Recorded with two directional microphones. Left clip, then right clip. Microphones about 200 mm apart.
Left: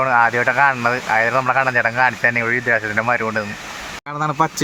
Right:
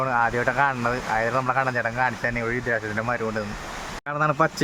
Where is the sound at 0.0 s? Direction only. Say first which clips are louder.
Left 7 dB; 25° left (ahead or behind).